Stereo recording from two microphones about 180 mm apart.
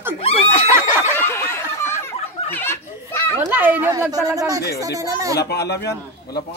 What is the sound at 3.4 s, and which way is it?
Speech, 10° right (ahead or behind).